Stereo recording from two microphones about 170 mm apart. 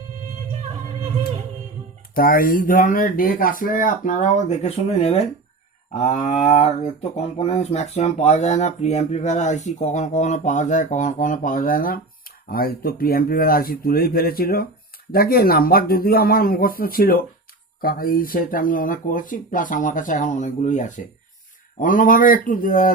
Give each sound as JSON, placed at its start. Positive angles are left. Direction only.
{"t": 2.1, "sound": "speech", "side_deg": 55}
{"t": 5.9, "sound": "a sound", "side_deg": 40}
{"t": 6.5, "sound": "speech", "side_deg": 35}